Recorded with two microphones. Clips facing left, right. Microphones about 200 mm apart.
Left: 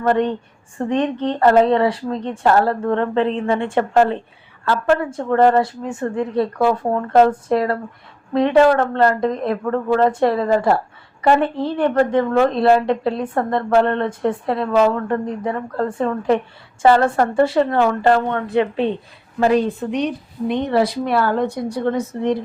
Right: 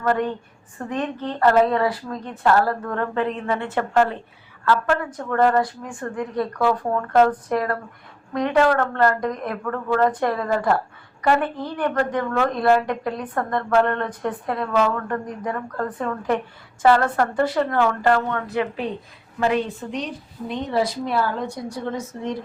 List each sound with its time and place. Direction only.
0.0 s a woman's voice: 25° left (ahead or behind)
19.6 s speech: 65° left (ahead or behind)